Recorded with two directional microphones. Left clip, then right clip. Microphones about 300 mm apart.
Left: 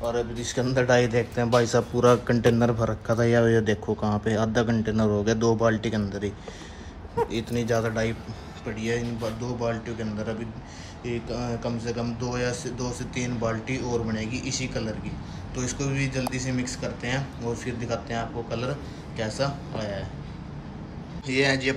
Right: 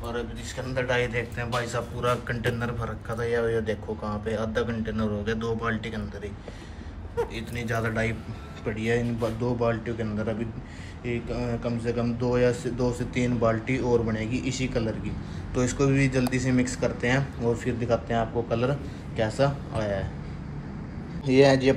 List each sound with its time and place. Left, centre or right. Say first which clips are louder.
0.0 s a man's voice: left 6 dB; centre
7.3 s a man's voice: left 5 dB; centre
21.3 s speech: right 4 dB; centre